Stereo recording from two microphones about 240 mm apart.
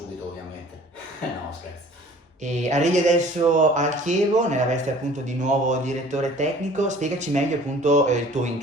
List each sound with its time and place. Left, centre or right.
2.4 s speech: right